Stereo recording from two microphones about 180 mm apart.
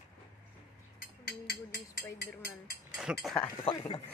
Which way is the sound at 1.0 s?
60° left (ahead or behind).